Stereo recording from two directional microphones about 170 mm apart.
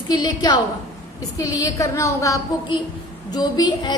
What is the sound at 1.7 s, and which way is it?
A woman's voice, 20° left (ahead or behind).